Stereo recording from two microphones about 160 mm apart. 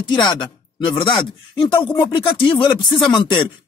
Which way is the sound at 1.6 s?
30° left (ahead or behind).